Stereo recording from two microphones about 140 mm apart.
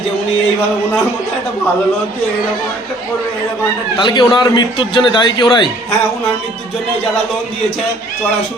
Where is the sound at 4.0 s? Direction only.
35° left (ahead or behind).